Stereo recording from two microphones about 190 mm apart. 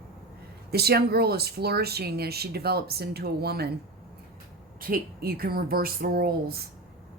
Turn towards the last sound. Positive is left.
turn(degrees=-55)  # may be behind; listen again after turning